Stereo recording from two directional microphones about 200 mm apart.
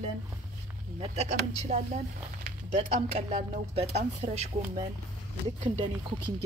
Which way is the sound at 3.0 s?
30° right (ahead or behind).